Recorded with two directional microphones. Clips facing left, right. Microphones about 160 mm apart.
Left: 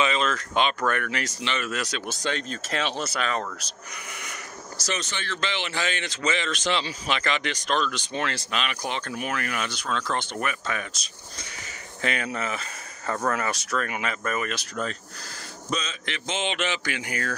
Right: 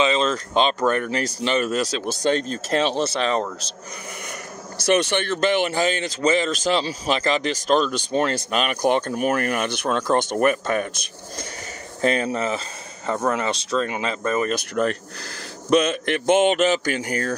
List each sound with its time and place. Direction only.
0.0 s speech: 25° right (ahead or behind)
4.7 s speech: 55° right (ahead or behind)
12.0 s speech: 35° right (ahead or behind)
13.1 s speech: 20° right (ahead or behind)
14.5 s speech: 60° right (ahead or behind); by 17.3 s 40° right (ahead or behind)